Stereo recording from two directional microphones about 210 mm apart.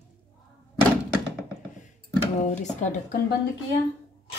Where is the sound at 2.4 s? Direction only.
35° left (ahead or behind).